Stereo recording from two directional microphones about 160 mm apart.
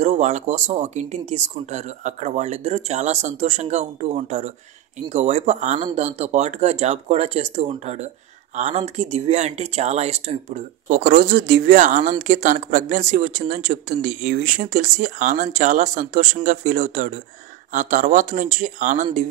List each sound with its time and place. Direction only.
0.0 s speech: 45° right (ahead or behind)